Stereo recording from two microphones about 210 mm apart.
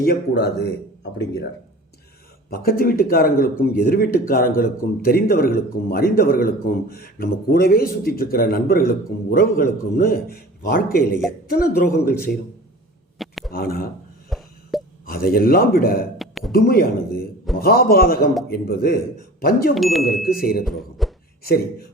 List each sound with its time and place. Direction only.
0.0 s speech: 50° left (ahead or behind)
2.5 s speech: 45° left (ahead or behind)
13.1 s a sound: centre (ahead or behind)
13.5 s speech: 45° left (ahead or behind)
14.3 s a sound: centre (ahead or behind)
15.0 s speech: 45° left (ahead or behind)
16.1 s a sound: centre (ahead or behind)
16.5 s speech: 45° left (ahead or behind)
19.7 s speech: centre (ahead or behind)
20.2 s speech: 45° left (ahead or behind)
20.7 s speech: centre (ahead or behind)